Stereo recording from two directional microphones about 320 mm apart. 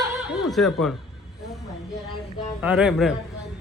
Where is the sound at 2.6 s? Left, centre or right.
Centre.